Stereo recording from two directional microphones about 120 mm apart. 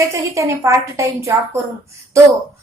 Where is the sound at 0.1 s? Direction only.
25° right (ahead or behind).